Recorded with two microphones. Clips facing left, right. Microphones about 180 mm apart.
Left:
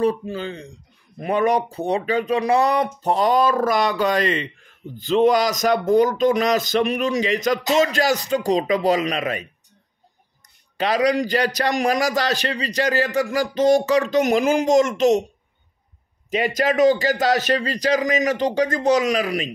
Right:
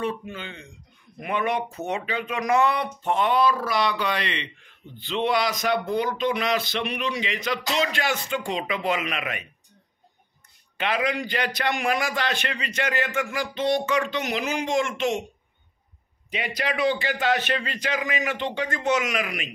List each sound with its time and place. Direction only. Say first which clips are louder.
0.0 s a man's voice: left 8 dB; 35° left (ahead or behind)
10.8 s a man's voice: left 7 dB; 40° left (ahead or behind)
16.3 s a man's voice: left 8 dB; 45° left (ahead or behind)